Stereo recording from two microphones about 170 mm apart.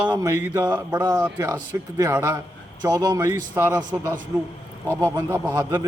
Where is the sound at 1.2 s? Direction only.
20° right (ahead or behind).